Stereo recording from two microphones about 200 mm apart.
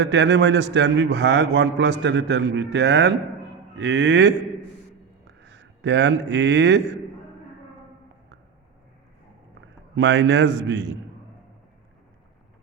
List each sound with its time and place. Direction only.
0.0 s a man's voice: 60° right (ahead or behind)
5.4 s a man's voice: 60° right (ahead or behind)
9.9 s a man's voice: 60° right (ahead or behind)